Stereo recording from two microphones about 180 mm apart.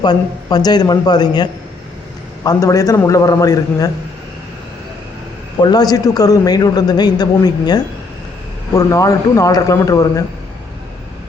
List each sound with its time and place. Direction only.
0.0 s a man's voice: 20° left (ahead or behind)
5.5 s a man's voice: 20° left (ahead or behind)